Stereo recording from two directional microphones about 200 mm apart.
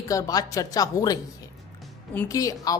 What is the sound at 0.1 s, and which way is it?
Speech, 15° left (ahead or behind).